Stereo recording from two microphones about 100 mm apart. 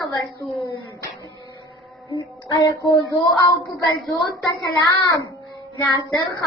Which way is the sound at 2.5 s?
40° left (ahead or behind).